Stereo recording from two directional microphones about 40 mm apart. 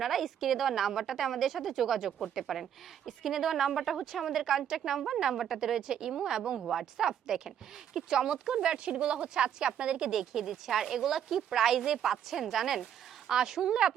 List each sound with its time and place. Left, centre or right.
0.0 s a woman's voice: centre
6.6 s a woman's voice: centre; by 10.1 s right
10.1 s a woman's voice: centre